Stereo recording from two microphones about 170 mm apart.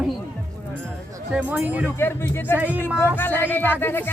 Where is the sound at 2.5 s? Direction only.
10° right (ahead or behind).